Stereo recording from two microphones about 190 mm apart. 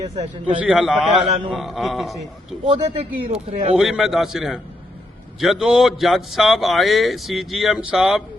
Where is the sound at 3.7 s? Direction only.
Centre (ahead or behind).